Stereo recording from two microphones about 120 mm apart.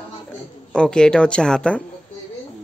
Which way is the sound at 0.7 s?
5° left (ahead or behind).